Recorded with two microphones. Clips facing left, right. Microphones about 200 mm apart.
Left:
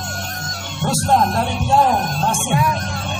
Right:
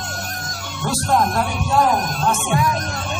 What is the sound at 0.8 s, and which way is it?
Speech, 25° left (ahead or behind).